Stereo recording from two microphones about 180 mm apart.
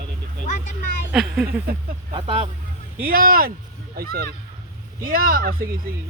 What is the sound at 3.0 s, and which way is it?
Speech, 50° right (ahead or behind).